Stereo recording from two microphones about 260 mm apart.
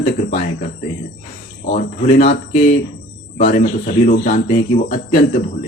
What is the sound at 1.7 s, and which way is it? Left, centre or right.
Speech, left.